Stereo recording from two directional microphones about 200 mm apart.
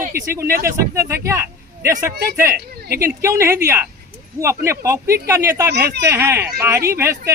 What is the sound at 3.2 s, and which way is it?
Speech, 15° right (ahead or behind).